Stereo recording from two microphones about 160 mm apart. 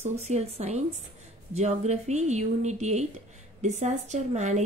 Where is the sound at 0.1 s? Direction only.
45° right (ahead or behind).